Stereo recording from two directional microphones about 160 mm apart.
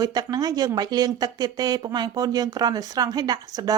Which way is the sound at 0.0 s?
25° right (ahead or behind).